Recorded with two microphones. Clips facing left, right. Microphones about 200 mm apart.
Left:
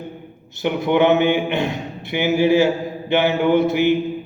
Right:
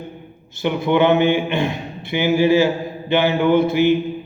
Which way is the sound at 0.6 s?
15° left (ahead or behind).